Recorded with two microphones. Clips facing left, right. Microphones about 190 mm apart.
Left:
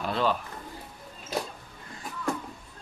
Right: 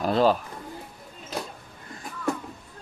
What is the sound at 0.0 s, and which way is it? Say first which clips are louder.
Speech: right 6 dB; 40° right (ahead or behind).